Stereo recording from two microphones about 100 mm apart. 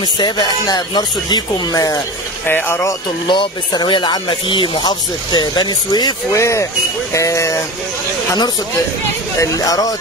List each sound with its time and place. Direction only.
0.0 s speech: 50° left (ahead or behind)
2.4 s speech: 20° left (ahead or behind)
3.3 s speech: 50° left (ahead or behind)
6.3 s speech: 30° left (ahead or behind)
9.4 s speech: 35° left (ahead or behind)